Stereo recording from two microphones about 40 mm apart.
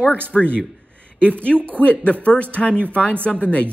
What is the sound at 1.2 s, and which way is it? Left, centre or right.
Speech, left.